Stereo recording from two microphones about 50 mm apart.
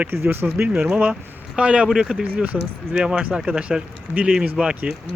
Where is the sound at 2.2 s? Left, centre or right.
Right.